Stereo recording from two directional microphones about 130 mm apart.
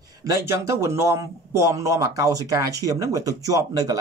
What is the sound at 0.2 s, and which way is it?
Speech, 20° right (ahead or behind).